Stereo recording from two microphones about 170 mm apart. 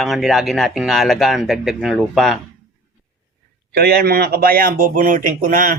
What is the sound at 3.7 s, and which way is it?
A man's voice, 65° right (ahead or behind).